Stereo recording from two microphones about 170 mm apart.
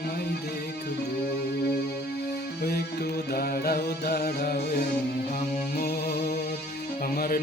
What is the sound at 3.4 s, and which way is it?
Music, 65° left (ahead or behind).